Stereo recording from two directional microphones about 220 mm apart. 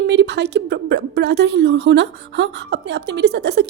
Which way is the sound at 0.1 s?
50° right (ahead or behind).